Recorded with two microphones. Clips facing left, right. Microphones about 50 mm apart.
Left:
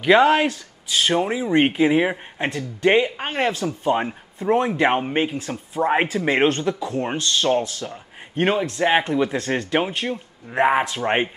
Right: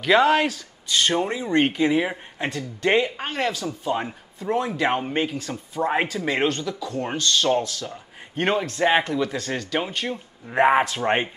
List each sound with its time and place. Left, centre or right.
0.0 s speech: centre
1.6 s speech: left
8.4 s speech: centre
9.0 s speech: left
10.5 s speech: centre